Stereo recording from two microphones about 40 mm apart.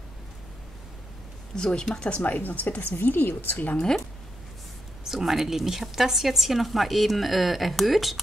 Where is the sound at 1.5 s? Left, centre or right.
Centre.